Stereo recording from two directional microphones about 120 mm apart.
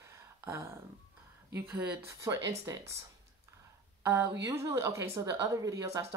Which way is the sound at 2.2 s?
25° right (ahead or behind).